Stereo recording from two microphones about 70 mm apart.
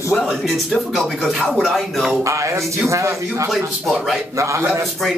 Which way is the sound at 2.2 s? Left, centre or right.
Right.